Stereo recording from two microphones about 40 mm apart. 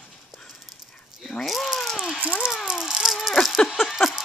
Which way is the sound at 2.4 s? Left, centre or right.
Centre.